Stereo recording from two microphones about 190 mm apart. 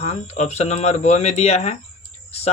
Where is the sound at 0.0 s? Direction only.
35° left (ahead or behind).